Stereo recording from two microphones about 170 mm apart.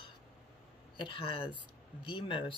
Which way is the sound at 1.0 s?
30° left (ahead or behind).